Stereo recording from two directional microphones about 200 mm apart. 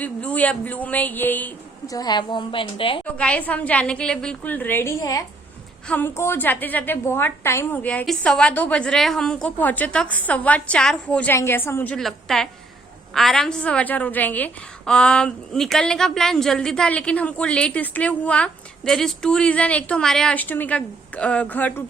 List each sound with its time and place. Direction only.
0.0 s a woman's voice: 5° left (ahead or behind)
2.0 s a woman's voice: 20° left (ahead or behind)
3.2 s a woman's voice: 5° left (ahead or behind)